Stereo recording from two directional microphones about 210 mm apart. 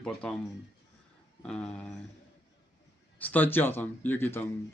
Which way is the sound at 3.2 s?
10° left (ahead or behind).